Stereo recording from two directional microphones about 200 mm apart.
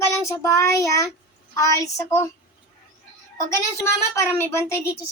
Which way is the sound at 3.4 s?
15° left (ahead or behind).